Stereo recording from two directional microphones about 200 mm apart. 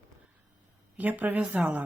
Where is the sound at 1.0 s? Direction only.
10° right (ahead or behind).